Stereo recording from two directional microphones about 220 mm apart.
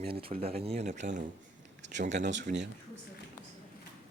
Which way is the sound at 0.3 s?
25° right (ahead or behind).